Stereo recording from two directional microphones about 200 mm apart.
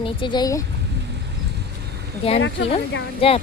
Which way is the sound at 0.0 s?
25° left (ahead or behind).